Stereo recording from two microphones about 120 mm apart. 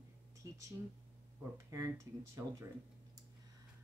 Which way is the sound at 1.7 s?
25° right (ahead or behind).